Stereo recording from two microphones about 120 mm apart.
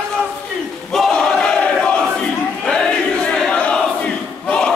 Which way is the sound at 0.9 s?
Centre (ahead or behind).